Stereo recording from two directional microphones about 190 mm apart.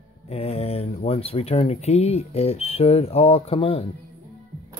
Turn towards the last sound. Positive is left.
turn(degrees=30)  # may be behind; listen again after turning